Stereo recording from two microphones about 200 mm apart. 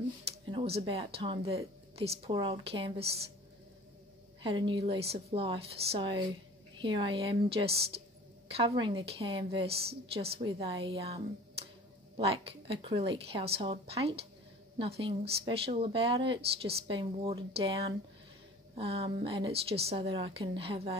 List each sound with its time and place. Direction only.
0.2 s speech: 30° right (ahead or behind)
4.4 s speech: 25° right (ahead or behind)